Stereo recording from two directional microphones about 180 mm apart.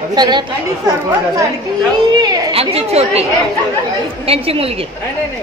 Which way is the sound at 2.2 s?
35° right (ahead or behind).